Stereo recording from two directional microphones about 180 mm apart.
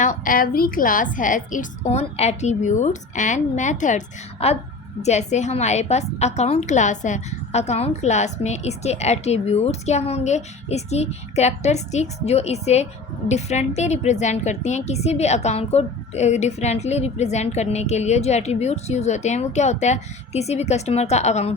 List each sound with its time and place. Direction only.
0.0 s a woman's voice: 45° left (ahead or behind)